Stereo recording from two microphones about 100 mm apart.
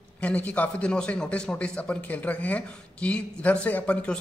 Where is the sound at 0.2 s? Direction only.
15° left (ahead or behind).